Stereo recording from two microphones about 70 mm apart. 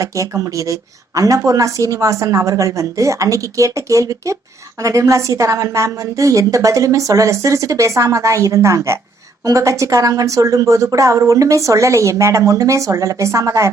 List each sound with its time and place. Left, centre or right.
0.0 s speech: right